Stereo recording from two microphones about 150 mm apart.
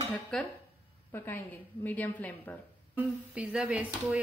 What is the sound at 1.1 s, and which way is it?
Speech, 15° left (ahead or behind).